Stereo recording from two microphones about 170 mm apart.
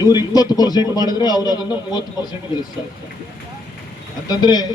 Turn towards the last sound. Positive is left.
turn(degrees=25)  # may be behind; listen again after turning